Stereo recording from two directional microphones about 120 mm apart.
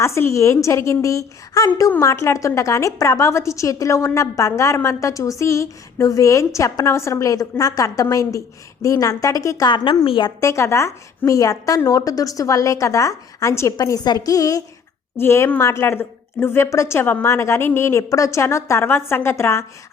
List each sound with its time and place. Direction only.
0.0 s a woman's voice: 25° left (ahead or behind); by 10.3 s 40° left (ahead or behind)
10.4 s a woman's voice: 25° left (ahead or behind)